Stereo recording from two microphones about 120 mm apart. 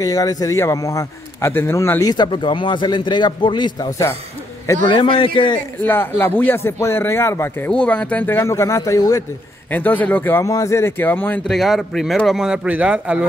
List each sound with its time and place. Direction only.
0.0 s a man's voice: 30° left (ahead or behind); by 5.6 s 45° left (ahead or behind)
5.8 s speech: 15° left (ahead or behind)
9.7 s speech: 15° left (ahead or behind)
11.4 s a man's voice: centre (ahead or behind)